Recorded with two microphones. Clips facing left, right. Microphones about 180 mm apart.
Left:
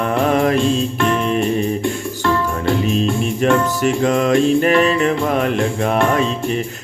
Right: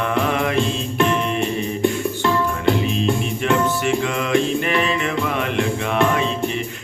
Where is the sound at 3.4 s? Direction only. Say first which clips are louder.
Left 4 dB; 40° left (ahead or behind).